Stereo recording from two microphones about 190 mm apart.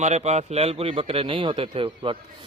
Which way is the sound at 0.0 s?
35° right (ahead or behind).